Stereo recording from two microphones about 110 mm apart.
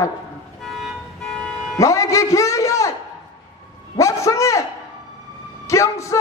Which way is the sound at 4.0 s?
30° left (ahead or behind).